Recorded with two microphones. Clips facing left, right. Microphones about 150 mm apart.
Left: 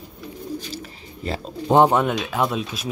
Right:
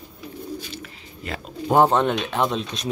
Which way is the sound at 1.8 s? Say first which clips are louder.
Right 1 dB; 10° left (ahead or behind).